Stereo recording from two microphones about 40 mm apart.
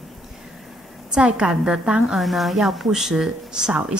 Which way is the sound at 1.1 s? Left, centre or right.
Right.